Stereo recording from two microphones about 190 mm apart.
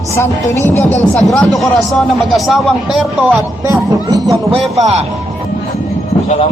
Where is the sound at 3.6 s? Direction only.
20° right (ahead or behind).